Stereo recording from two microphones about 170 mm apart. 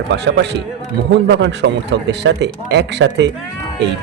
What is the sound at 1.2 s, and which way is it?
A man's voice, 90° right.